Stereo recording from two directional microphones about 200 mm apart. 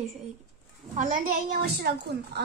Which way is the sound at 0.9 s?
40° right (ahead or behind).